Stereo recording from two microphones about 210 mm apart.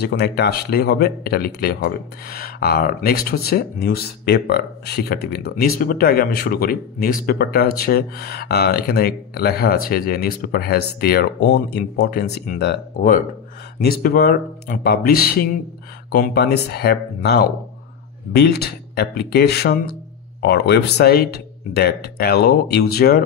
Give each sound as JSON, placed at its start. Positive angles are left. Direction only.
{"t": 0.0, "sound": "speech", "side_deg": 50}